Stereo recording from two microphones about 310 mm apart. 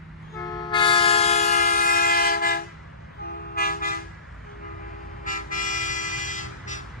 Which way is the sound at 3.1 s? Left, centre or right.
Left.